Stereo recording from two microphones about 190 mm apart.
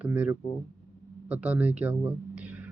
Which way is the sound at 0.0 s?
10° right (ahead or behind).